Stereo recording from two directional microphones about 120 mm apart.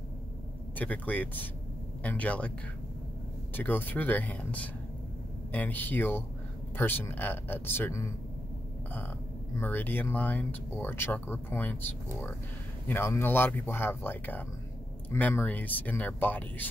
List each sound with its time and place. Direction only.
0.7 s speech: 15° left (ahead or behind)
3.5 s speech: 15° left (ahead or behind)
9.6 s speech: 15° left (ahead or behind)